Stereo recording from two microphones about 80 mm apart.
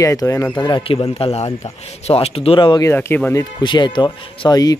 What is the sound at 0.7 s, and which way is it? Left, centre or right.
Speech, left.